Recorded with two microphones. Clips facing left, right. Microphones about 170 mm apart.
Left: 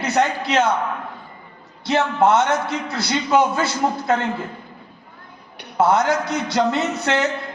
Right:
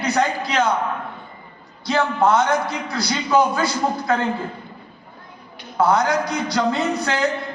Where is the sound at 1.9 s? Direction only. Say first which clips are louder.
Left 1 dB; 25° left (ahead or behind).